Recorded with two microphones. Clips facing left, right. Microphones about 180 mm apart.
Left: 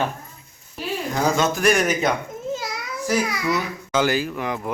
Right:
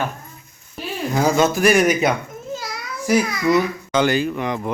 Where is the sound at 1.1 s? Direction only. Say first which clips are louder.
Right 4 dB; 10° right (ahead or behind).